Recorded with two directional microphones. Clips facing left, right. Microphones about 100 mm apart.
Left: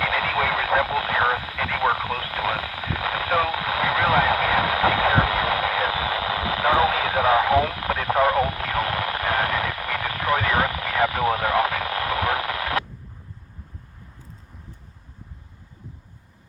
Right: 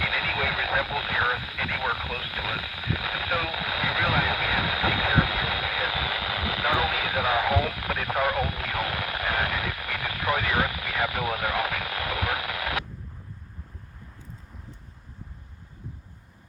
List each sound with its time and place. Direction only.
0.0 s radio: 40° left (ahead or behind)